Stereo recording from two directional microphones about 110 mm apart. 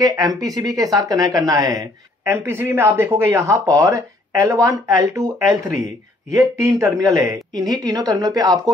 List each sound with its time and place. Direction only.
0.0 s a woman's voice: 35° right (ahead or behind)